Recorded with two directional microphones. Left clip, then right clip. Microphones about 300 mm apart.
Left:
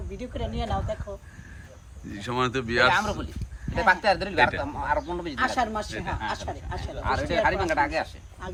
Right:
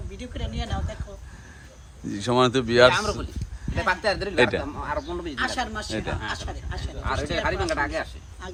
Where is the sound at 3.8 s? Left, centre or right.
Left.